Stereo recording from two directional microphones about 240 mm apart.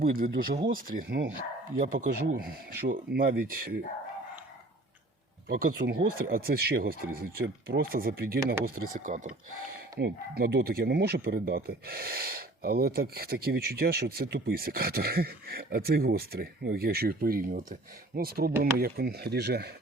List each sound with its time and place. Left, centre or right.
0.0 s speech: right
5.5 s speech: right